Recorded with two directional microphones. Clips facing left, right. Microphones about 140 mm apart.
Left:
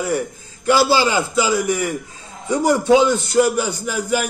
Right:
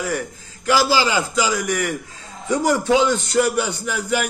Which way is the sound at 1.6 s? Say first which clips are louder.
Left 2 dB; 10° left (ahead or behind).